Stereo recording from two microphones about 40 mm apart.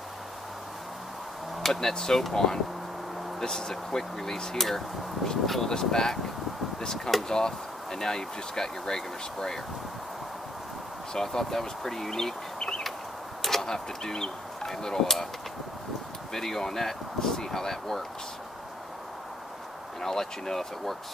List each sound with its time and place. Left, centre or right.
1.6 s speech: centre
7.2 s speech: centre
11.1 s speech: centre
16.3 s speech: centre
20.0 s speech: centre